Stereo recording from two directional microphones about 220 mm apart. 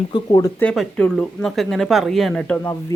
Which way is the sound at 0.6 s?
5° left (ahead or behind).